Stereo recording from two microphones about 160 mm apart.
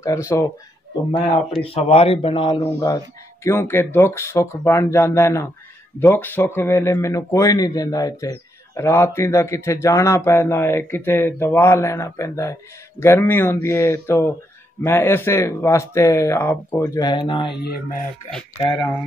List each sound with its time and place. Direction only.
0.0 s a man's voice: 20° left (ahead or behind)
1.6 s speech: 35° left (ahead or behind)
3.4 s a man's voice: 15° left (ahead or behind); by 17.6 s 30° left (ahead or behind)
18.6 s a man's voice: 30° left (ahead or behind)